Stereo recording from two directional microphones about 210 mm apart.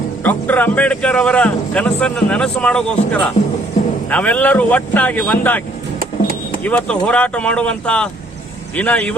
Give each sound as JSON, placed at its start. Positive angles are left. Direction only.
{"t": 0.2, "sound": "a man's voice", "side_deg": 10}